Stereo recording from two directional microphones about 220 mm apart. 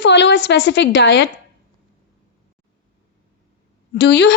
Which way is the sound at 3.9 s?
50° left (ahead or behind).